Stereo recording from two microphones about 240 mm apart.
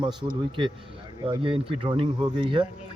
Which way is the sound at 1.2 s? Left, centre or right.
Right.